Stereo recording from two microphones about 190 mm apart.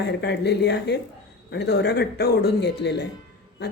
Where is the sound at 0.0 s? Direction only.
60° left (ahead or behind).